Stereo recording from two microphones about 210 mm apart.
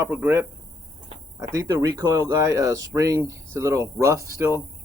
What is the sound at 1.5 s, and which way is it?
Speech, 15° right (ahead or behind).